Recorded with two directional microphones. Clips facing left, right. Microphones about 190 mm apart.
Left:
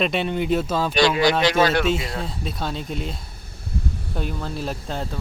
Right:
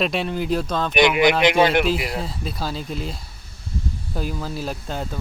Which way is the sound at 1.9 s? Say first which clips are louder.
Even; centre (ahead or behind).